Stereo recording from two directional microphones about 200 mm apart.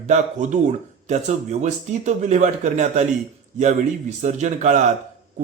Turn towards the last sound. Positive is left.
turn(degrees=-35)  # may be behind; listen again after turning